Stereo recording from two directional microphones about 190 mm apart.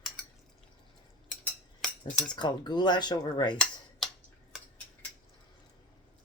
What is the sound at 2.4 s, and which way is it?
Speech, 25° left (ahead or behind).